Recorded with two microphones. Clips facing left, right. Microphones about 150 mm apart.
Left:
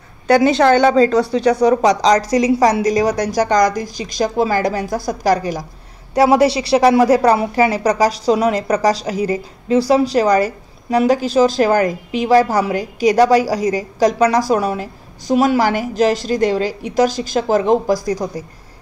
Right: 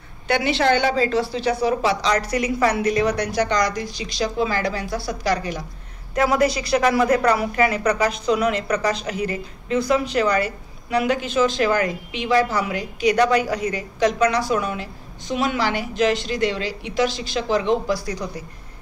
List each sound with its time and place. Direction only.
0.3 s speech: 40° left (ahead or behind)
6.1 s speech: 30° left (ahead or behind)